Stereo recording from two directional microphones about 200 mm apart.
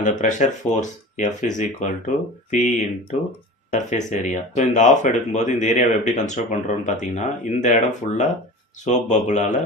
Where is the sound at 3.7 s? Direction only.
35° left (ahead or behind).